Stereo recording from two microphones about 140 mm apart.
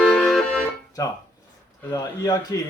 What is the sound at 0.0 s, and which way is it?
Music, centre (ahead or behind).